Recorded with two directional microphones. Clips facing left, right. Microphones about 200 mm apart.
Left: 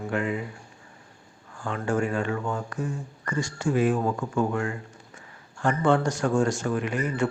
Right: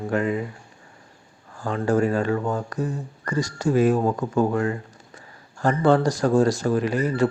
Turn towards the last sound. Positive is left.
turn(degrees=-35)  # may be behind; listen again after turning